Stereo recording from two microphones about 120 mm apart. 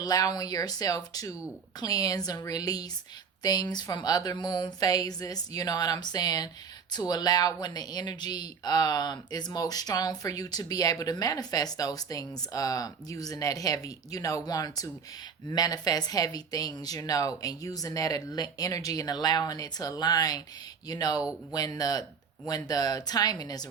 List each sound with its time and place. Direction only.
0.0 s speech: 30° left (ahead or behind)